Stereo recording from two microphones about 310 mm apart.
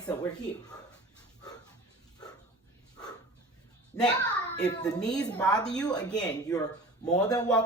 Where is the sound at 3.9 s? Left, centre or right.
Centre.